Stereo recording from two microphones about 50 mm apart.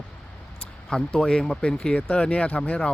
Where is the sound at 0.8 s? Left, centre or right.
Centre.